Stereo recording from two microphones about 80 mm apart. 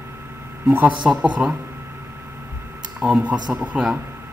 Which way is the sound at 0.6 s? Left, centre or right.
Right.